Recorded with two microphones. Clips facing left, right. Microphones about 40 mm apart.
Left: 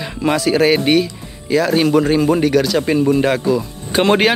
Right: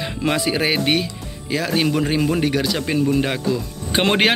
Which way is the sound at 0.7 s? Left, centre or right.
Centre.